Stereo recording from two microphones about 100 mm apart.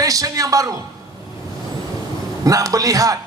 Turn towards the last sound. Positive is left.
turn(degrees=-35)  # may be behind; listen again after turning